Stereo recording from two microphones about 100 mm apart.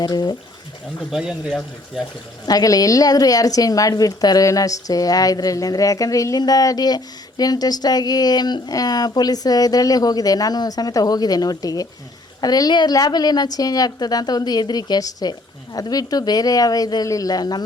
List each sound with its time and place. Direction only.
0.0 s speech: 45° left (ahead or behind)
1.1 s speech: centre (ahead or behind)
2.5 s a woman's voice: 40° left (ahead or behind)